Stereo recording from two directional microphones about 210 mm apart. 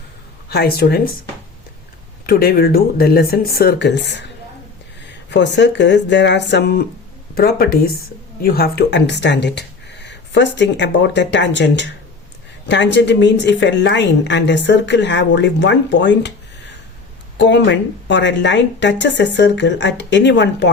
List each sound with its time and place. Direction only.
0.4 s speech: 50° left (ahead or behind)
2.2 s a woman's voice: 45° left (ahead or behind)